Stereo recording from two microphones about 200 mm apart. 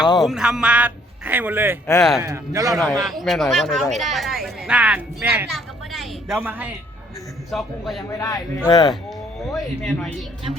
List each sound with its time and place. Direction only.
0.2 s a man's voice: centre (ahead or behind)
2.7 s a man's voice: centre (ahead or behind)
7.5 s speech: centre (ahead or behind)
8.2 s a man's voice: 20° left (ahead or behind)
9.6 s speech: centre (ahead or behind)